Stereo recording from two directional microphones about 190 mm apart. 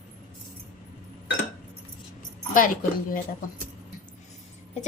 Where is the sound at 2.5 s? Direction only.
45° left (ahead or behind).